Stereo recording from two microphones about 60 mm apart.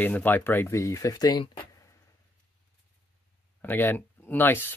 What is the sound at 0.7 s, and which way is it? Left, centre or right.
Speech, left.